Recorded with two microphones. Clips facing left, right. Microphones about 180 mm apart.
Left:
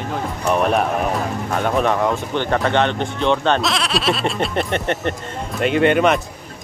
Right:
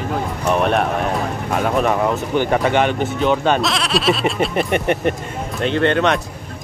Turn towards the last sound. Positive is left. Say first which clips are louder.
# left 1 dB
turn(degrees=5)  # may be behind; listen again after turning